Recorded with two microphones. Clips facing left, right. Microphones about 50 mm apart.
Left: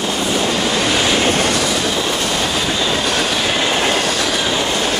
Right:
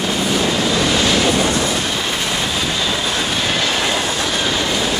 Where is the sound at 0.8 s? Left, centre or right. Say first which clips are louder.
Left 1 dB; centre.